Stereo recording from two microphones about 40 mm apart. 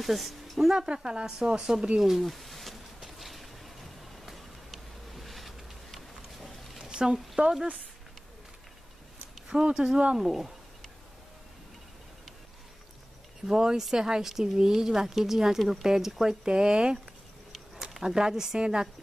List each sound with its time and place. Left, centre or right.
0.0 s a woman's voice: centre
0.7 s speech: right
2.2 s a sound: centre
6.8 s a sound: centre
9.5 s speech: centre
10.1 s speech: centre
13.5 s speech: centre